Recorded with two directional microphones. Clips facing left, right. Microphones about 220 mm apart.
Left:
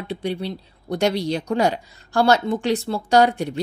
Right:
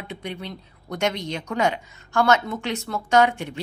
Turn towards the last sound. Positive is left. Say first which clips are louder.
# left 2 dB
turn(degrees=35)  # may be behind; listen again after turning